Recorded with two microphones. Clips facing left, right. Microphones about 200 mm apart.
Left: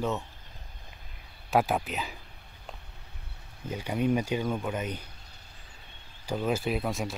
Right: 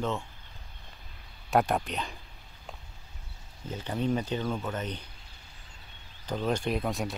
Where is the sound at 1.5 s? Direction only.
Centre (ahead or behind).